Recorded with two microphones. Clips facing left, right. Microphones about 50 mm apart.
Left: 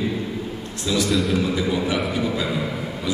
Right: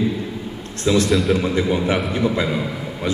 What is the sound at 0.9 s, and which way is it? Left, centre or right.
Speech, right.